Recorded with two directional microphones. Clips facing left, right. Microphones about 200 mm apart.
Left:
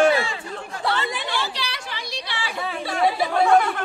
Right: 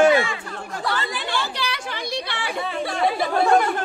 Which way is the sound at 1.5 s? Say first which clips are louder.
Right 4 dB; 55° right (ahead or behind).